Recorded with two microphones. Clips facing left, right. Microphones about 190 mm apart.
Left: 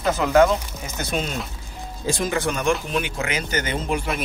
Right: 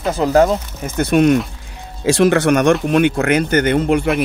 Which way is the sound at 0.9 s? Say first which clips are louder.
Right 14 dB; 60° right (ahead or behind).